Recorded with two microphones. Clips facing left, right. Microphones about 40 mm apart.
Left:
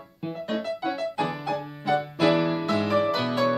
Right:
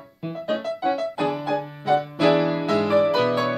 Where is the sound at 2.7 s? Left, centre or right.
Centre.